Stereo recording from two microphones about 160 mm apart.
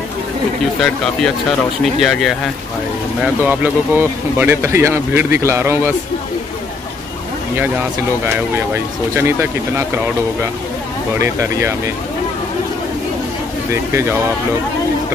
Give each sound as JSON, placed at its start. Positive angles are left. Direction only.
{"t": 0.7, "sound": "speech", "side_deg": 5}
{"t": 3.4, "sound": "speech", "side_deg": -10}
{"t": 8.7, "sound": "speech", "side_deg": -15}
{"t": 11.1, "sound": "speech", "side_deg": -20}